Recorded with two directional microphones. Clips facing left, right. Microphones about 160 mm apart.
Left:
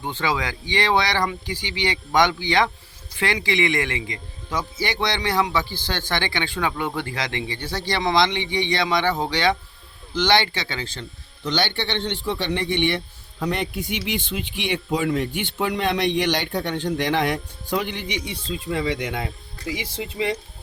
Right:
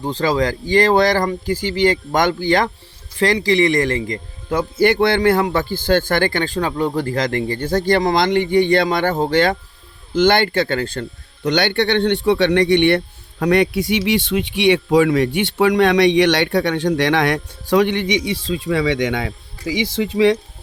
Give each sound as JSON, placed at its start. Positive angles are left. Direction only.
{"t": 0.0, "sound": "speech", "side_deg": -35}